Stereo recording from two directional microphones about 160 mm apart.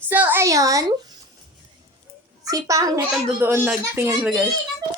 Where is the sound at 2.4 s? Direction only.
20° right (ahead or behind).